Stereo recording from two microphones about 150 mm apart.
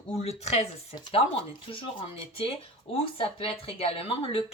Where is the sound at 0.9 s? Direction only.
35° left (ahead or behind).